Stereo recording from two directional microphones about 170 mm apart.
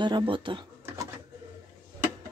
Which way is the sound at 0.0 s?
30° right (ahead or behind).